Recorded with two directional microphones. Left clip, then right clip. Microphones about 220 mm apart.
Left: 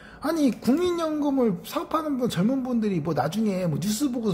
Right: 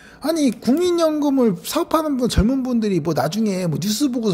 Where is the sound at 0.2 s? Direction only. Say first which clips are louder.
Right 5 dB; 25° right (ahead or behind).